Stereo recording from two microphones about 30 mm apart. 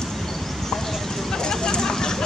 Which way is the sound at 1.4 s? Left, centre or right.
Left.